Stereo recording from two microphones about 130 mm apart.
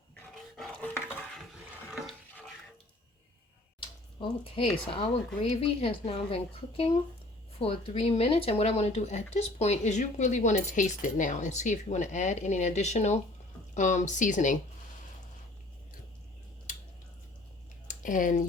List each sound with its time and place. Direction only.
0.5 s dog: 5° left (ahead or behind)
3.8 s speech: 40° left (ahead or behind); by 14.6 s 75° left (ahead or behind)
17.8 s a sound: 90° left